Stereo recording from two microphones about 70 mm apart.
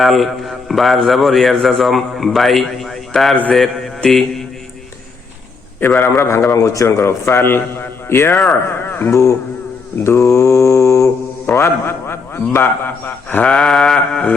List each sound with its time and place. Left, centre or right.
0.0 s a man's voice: centre
6.1 s a man's voice: left
8.3 s a man's voice: centre
8.9 s a man's voice: left
10.0 s mantra: left
11.5 s a sound: left
12.5 s a man's voice: left
13.5 s a sound: centre